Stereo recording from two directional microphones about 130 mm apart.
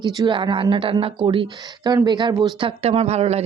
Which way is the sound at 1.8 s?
30° right (ahead or behind).